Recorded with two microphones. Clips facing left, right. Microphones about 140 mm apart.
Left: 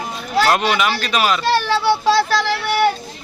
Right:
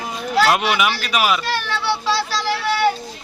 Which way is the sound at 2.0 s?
50° left (ahead or behind).